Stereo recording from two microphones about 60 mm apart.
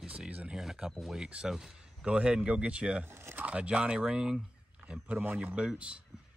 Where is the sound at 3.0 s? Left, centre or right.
Right.